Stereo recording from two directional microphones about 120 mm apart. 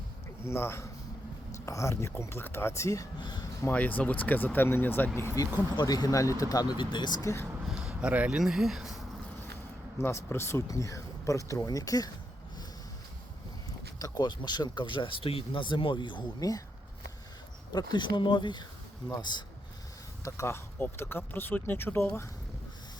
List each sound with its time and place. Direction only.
0.4 s speech: 20° left (ahead or behind)
3.2 s speech: 40° left (ahead or behind)
3.6 s speech: 15° left (ahead or behind)
5.4 s speech: 35° left (ahead or behind)
7.7 s speech: 10° right (ahead or behind)
10.0 s speech: 20° left (ahead or behind)
14.0 s speech: 35° left (ahead or behind)
17.7 s speech: 35° left (ahead or behind)
20.2 s speech: 25° left (ahead or behind)